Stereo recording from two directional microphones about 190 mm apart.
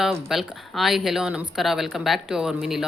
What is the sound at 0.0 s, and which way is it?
Speech, centre (ahead or behind).